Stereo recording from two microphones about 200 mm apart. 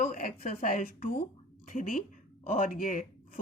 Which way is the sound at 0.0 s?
45° left (ahead or behind).